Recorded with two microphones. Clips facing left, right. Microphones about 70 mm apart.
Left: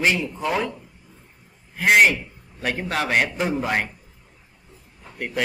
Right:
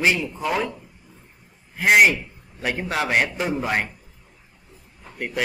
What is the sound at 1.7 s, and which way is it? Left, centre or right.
A man's voice, centre.